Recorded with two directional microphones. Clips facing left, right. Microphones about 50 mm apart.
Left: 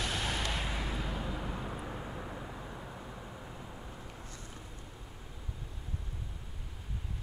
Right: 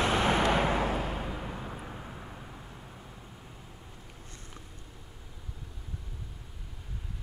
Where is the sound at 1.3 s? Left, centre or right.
Centre; by 3.9 s left.